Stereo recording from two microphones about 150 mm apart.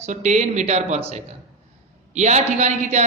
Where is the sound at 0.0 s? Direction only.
50° right (ahead or behind).